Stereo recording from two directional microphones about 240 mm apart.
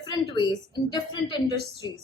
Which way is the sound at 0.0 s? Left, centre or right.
Centre.